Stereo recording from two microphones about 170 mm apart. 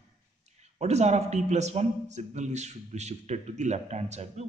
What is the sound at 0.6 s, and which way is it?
A man's voice, 40° right (ahead or behind).